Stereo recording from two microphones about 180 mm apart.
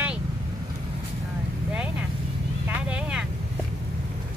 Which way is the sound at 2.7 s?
5° right (ahead or behind).